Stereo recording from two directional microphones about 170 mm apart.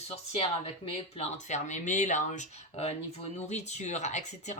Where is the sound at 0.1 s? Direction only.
35° left (ahead or behind).